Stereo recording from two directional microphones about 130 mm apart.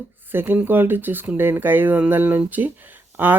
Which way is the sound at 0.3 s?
15° right (ahead or behind).